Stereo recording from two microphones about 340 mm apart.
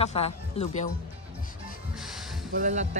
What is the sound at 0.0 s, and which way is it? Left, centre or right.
Speech, centre.